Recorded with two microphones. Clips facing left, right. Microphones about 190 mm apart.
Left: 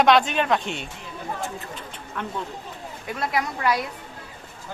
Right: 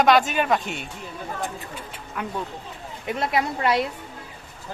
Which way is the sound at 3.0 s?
25° right (ahead or behind).